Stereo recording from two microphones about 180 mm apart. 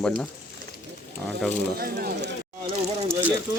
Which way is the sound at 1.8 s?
55° right (ahead or behind).